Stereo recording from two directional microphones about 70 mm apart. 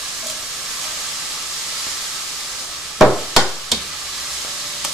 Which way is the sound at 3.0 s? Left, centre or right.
Centre.